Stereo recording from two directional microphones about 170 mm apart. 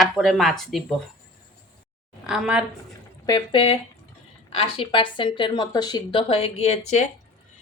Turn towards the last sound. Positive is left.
turn(degrees=40)  # may be behind; listen again after turning